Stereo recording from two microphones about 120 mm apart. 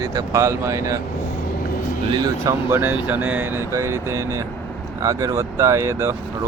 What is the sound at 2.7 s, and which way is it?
Speech, 15° right (ahead or behind).